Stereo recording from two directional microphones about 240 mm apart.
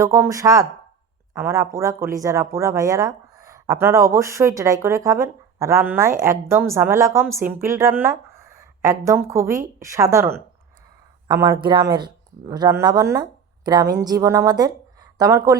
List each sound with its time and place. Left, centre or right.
0.0 s speech: centre
11.3 s speech: centre